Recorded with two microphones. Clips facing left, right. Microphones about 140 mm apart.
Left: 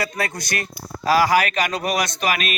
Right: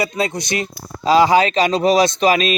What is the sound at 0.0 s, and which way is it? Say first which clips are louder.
Speech: right 5 dB; 20° right (ahead or behind).